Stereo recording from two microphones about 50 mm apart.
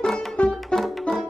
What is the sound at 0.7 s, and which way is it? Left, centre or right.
Music, centre.